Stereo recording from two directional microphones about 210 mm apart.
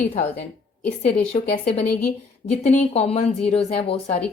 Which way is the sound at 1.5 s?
35° left (ahead or behind).